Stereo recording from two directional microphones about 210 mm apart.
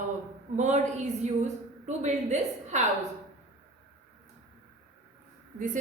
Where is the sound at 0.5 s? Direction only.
35° right (ahead or behind).